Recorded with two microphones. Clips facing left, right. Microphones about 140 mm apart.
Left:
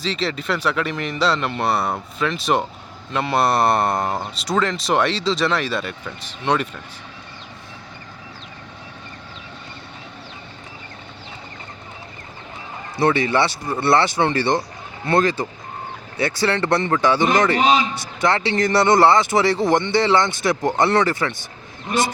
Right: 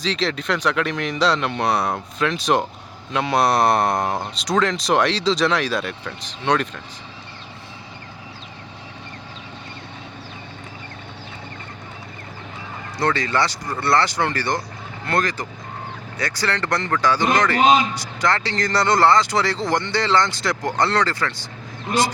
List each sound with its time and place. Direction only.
0.0 s speech: 5° left (ahead or behind)
13.0 s speech: 25° left (ahead or behind)